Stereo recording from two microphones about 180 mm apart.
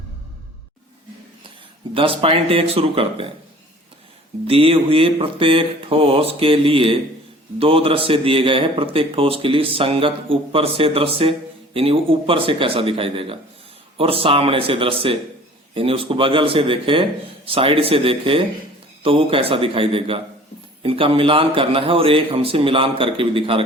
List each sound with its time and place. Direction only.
1.5 s speech: 30° right (ahead or behind)
4.4 s speech: 30° right (ahead or behind)